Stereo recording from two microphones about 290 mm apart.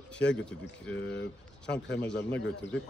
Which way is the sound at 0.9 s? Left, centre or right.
Left.